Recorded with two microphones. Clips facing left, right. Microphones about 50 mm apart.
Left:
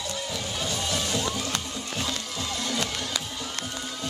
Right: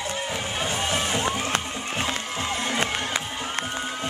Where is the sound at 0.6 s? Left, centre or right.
Right.